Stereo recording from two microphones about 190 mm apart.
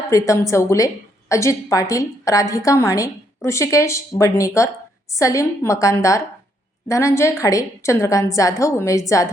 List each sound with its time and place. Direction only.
0.1 s a woman's voice: 15° left (ahead or behind)